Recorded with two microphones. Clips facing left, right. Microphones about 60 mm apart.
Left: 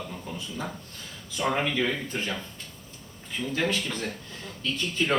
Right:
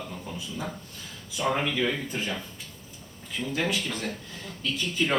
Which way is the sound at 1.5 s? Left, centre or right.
Centre.